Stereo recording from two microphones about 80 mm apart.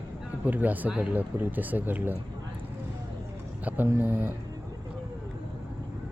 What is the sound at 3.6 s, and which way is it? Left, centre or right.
Speech, right.